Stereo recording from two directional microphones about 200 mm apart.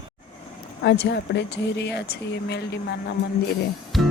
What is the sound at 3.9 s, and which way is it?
Music, centre (ahead or behind).